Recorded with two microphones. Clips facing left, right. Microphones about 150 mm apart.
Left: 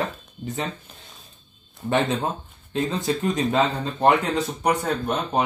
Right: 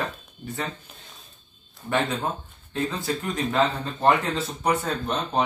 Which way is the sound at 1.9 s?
20° left (ahead or behind).